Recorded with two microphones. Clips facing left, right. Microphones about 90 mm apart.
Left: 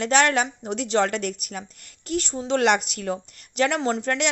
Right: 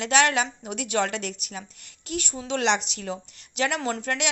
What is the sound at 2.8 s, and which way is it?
Speech, 50° left (ahead or behind).